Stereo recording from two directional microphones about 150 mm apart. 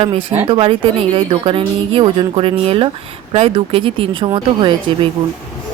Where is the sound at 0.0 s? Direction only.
35° right (ahead or behind).